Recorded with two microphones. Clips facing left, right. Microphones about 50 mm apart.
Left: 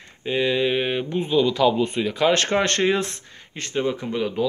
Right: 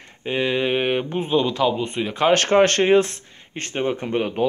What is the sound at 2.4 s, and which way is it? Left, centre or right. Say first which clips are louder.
Speech: right 4 dB; right.